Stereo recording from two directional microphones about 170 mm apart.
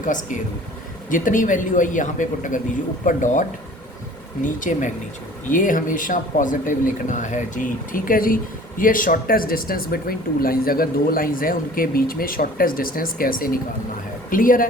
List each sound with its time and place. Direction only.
0.0 s speech: 50° left (ahead or behind)
4.4 s speech: 50° left (ahead or behind)